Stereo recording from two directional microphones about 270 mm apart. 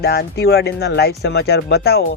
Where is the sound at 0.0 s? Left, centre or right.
Left.